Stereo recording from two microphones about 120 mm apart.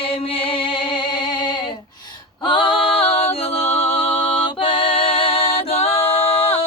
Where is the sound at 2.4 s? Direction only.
45° left (ahead or behind).